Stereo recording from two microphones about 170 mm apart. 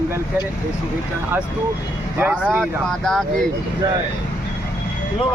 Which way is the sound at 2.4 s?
Centre (ahead or behind).